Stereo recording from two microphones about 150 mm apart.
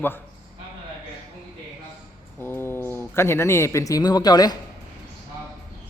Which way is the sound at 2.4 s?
15° left (ahead or behind).